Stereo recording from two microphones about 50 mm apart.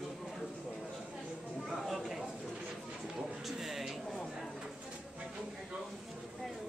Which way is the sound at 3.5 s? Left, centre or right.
Centre.